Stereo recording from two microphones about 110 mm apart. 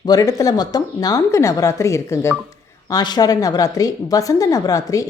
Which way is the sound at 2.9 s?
40° left (ahead or behind).